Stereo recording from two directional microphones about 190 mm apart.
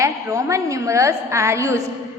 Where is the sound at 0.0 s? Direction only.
15° right (ahead or behind).